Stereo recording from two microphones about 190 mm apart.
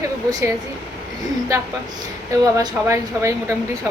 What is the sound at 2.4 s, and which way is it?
Speech, 15° right (ahead or behind).